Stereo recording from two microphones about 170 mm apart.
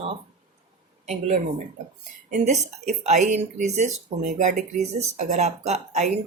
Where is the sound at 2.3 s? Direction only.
40° right (ahead or behind).